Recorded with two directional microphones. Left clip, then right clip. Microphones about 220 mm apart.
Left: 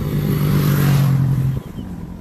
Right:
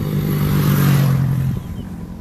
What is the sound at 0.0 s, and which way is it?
Vehicle, 15° right (ahead or behind).